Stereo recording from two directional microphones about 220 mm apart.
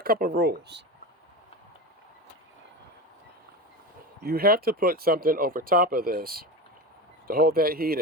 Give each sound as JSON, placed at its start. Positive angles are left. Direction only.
{"t": 0.0, "sound": "speech", "side_deg": -40}
{"t": 4.2, "sound": "speech", "side_deg": -45}